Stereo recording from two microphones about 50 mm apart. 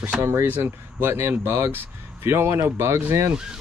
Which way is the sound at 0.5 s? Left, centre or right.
Right.